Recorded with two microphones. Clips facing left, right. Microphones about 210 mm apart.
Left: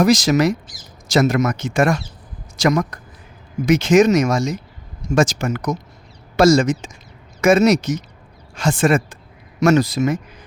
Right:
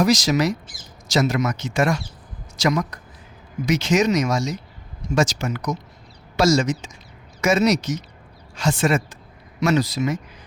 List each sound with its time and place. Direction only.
0.0 s a man's voice: 55° left (ahead or behind)